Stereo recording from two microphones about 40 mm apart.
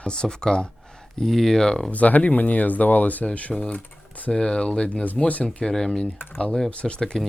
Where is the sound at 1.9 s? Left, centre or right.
Left.